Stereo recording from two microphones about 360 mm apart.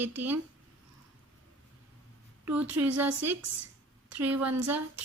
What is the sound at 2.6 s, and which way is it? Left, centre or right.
Speech, right.